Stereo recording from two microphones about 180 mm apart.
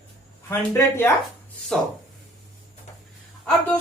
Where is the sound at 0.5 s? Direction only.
15° left (ahead or behind).